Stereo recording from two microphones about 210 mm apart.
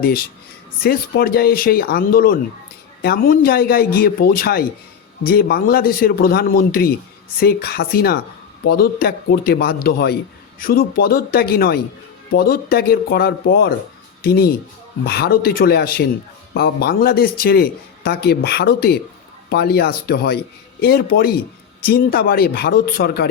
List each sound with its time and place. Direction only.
0.0 s a man's voice: 45° left (ahead or behind)